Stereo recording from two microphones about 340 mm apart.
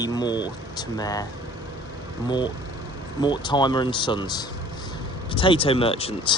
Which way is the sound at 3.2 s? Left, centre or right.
Centre.